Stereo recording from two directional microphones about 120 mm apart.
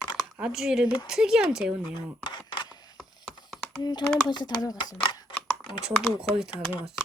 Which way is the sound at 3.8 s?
35° left (ahead or behind).